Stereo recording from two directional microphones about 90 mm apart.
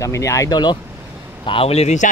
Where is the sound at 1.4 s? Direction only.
70° left (ahead or behind).